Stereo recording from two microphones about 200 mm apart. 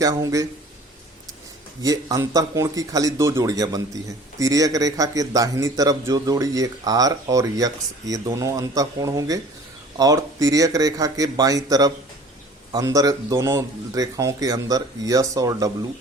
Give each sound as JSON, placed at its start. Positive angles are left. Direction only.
{"t": 0.0, "sound": "speech", "side_deg": -15}
{"t": 1.8, "sound": "speech", "side_deg": -15}